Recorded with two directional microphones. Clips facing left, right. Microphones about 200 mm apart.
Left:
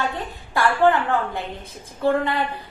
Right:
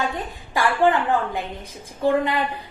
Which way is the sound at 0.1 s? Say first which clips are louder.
Even; 15° right (ahead or behind).